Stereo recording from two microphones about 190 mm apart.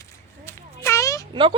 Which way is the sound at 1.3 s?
25° right (ahead or behind).